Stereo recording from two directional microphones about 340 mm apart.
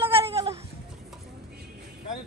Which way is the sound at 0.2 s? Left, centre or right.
Centre.